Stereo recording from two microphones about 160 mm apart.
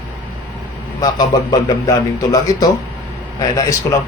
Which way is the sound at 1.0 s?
25° left (ahead or behind).